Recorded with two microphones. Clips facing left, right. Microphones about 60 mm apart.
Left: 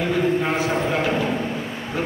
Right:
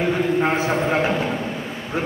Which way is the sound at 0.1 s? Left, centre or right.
Right.